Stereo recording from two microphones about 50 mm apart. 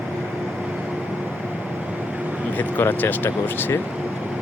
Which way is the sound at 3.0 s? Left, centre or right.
Left.